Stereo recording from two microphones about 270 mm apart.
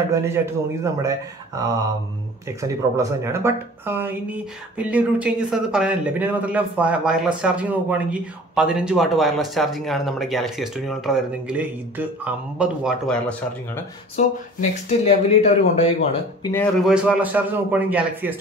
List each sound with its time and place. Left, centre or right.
0.1 s speech: centre
14.1 s speech: left
16.5 s speech: centre